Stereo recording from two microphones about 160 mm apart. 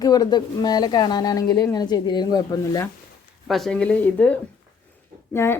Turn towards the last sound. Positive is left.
turn(degrees=15)  # may be behind; listen again after turning